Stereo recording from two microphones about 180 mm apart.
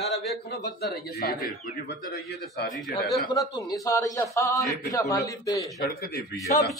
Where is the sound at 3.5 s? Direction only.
20° left (ahead or behind).